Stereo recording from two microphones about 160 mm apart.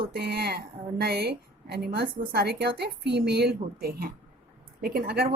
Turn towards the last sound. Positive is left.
turn(degrees=-75)  # may be behind; listen again after turning